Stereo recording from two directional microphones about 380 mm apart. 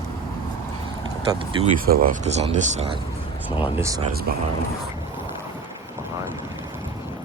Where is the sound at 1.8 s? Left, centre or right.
Right.